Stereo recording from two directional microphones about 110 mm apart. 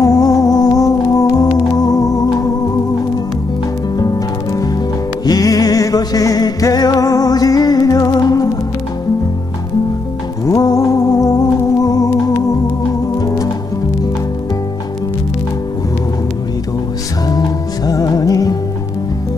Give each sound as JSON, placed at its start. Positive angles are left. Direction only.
{"t": 0.0, "sound": "music", "side_deg": 35}
{"t": 4.0, "sound": "music", "side_deg": 30}
{"t": 10.4, "sound": "music", "side_deg": 35}
{"t": 13.2, "sound": "music", "side_deg": 35}
{"t": 17.8, "sound": "music", "side_deg": 35}